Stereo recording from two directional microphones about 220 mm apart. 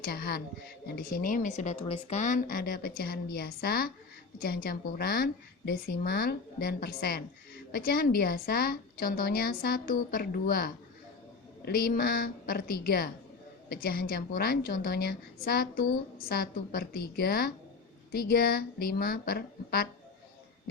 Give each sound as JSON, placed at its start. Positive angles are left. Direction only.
{"t": 0.0, "sound": "a woman's voice", "side_deg": 45}